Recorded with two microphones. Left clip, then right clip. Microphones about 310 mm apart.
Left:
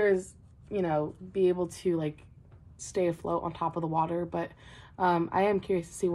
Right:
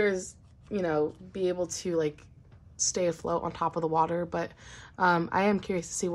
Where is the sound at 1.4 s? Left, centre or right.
Right.